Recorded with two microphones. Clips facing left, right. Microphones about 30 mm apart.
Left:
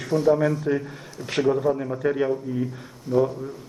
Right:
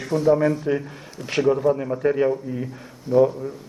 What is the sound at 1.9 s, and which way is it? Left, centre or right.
Speech, centre.